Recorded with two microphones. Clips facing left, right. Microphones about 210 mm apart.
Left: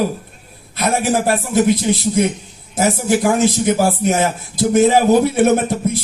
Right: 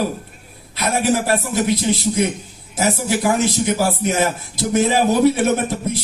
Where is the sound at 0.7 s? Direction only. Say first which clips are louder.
Left 2 dB; 50° left (ahead or behind).